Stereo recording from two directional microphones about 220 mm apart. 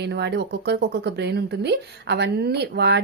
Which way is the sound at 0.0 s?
50° right (ahead or behind).